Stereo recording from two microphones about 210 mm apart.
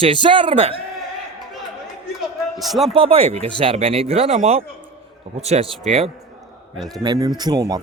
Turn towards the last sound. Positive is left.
turn(degrees=-15)  # may be behind; listen again after turning